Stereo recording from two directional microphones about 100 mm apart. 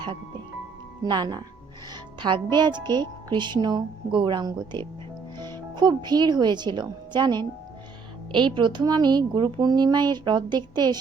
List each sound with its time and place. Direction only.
1.0 s speech: 50° right (ahead or behind)